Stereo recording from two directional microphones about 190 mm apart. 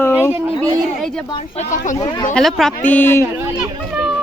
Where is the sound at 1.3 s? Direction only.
30° left (ahead or behind).